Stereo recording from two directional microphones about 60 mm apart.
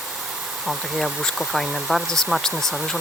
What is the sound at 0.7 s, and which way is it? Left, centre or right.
Speech, centre.